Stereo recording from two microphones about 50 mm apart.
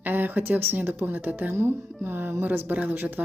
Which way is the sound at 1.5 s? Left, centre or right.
Right.